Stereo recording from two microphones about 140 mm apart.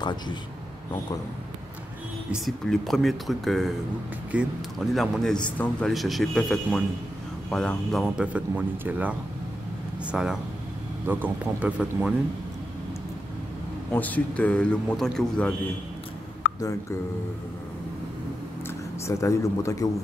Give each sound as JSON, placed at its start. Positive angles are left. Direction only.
{"t": 0.0, "sound": "speech", "side_deg": 30}
{"t": 2.3, "sound": "a man's voice", "side_deg": 0}
{"t": 8.3, "sound": "speech", "side_deg": -10}
{"t": 10.1, "sound": "a man's voice", "side_deg": -5}
{"t": 13.9, "sound": "speech", "side_deg": 10}
{"t": 18.7, "sound": "speech", "side_deg": 20}